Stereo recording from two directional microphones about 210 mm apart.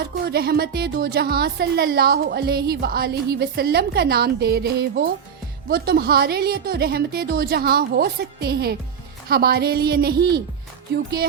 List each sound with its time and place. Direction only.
0.0 s speech: 50° right (ahead or behind)